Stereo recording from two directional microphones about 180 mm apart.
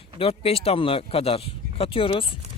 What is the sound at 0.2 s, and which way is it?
Speech, 30° left (ahead or behind).